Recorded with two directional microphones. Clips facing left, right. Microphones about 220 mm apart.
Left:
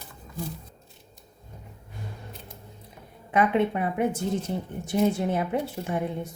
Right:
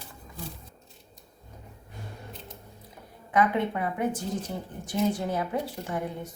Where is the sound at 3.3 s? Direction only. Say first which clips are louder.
Left 2 dB; 25° left (ahead or behind).